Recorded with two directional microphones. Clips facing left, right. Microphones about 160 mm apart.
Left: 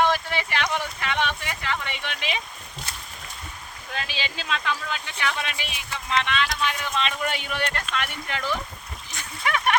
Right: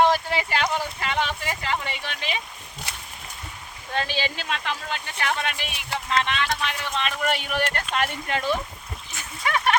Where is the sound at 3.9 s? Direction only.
40° right (ahead or behind).